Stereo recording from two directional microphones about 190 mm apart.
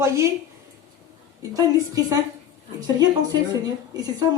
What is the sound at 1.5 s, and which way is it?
Speech, 20° right (ahead or behind).